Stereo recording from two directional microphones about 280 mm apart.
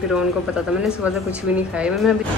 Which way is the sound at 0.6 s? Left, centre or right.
Centre.